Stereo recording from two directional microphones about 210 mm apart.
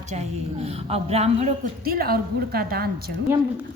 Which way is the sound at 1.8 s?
45° right (ahead or behind).